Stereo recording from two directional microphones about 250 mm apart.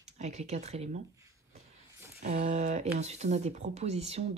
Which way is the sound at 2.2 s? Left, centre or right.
Right.